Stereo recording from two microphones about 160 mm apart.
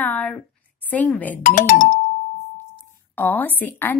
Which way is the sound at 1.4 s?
55° left (ahead or behind).